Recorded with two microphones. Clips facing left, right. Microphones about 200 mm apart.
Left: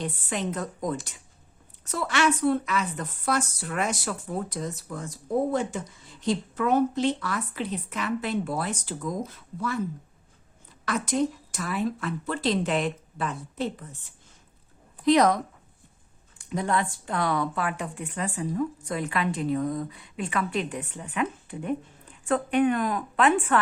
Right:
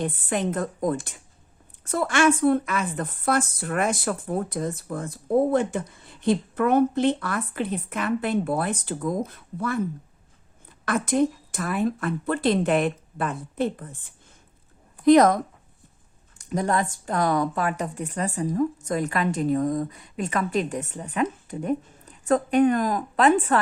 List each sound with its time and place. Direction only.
0.0 s a woman's voice: 50° right (ahead or behind)
10.8 s a woman's voice: 55° right (ahead or behind)
16.4 s speech: 40° right (ahead or behind)